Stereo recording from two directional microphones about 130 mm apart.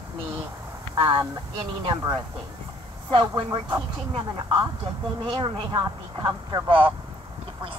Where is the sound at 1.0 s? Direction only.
40° right (ahead or behind).